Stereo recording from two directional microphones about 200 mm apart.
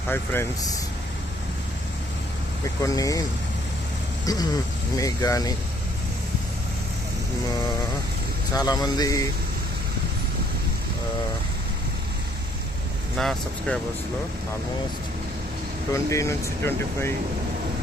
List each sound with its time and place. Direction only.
0.1 s speech: 10° left (ahead or behind)
2.8 s speech: 15° left (ahead or behind)
4.3 s speech: 20° left (ahead or behind)
8.5 s a man's voice: 20° left (ahead or behind)
13.1 s speech: centre (ahead or behind)
15.9 s speech: 15° left (ahead or behind)